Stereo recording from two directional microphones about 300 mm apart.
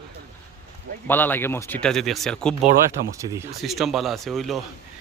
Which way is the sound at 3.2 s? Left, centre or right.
Centre.